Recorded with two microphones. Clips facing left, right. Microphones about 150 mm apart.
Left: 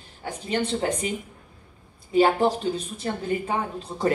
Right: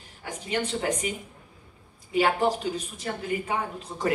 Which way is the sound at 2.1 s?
35° left (ahead or behind).